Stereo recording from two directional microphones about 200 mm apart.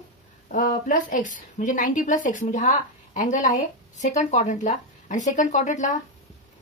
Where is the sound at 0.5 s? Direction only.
40° left (ahead or behind).